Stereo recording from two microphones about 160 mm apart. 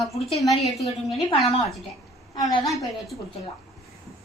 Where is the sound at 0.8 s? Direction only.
40° left (ahead or behind).